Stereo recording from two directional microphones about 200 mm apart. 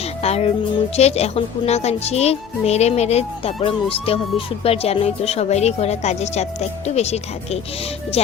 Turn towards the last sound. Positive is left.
turn(degrees=30)  # may be behind; listen again after turning